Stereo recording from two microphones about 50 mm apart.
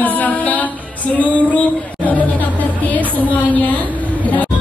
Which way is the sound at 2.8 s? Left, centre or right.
Left.